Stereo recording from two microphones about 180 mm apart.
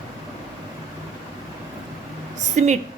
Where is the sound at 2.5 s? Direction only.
40° right (ahead or behind).